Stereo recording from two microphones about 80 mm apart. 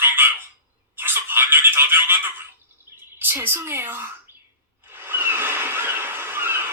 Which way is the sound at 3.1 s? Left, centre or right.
Right.